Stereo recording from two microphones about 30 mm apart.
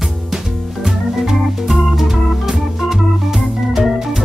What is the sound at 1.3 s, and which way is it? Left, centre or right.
Organ, centre.